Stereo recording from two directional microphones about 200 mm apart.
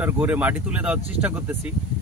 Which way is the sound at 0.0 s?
10° right (ahead or behind).